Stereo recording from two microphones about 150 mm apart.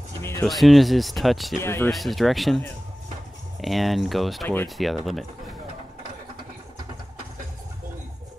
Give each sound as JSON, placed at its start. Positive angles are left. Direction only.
{"t": 0.4, "sound": "speech", "side_deg": 0}
{"t": 1.6, "sound": "speech", "side_deg": 15}
{"t": 1.9, "sound": "speech", "side_deg": 0}
{"t": 3.6, "sound": "speech", "side_deg": 0}